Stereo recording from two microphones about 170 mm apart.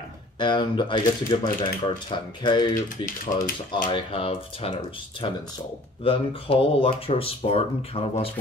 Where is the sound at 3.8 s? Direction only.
30° left (ahead or behind).